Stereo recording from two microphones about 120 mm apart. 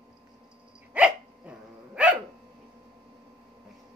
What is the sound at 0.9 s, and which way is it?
Dog, 10° right (ahead or behind).